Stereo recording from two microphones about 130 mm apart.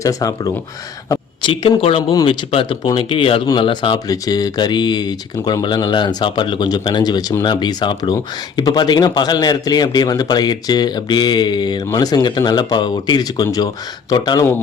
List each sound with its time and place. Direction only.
0.0 s speech: 25° left (ahead or behind)
1.4 s speech: 40° left (ahead or behind)